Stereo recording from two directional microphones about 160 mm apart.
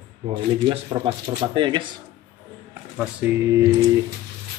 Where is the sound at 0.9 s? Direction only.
30° right (ahead or behind).